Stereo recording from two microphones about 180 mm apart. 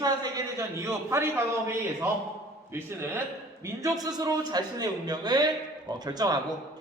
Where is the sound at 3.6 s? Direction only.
20° right (ahead or behind).